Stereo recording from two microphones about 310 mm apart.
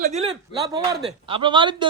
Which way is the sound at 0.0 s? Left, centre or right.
Right.